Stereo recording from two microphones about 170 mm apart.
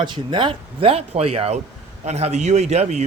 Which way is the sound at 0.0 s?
25° right (ahead or behind).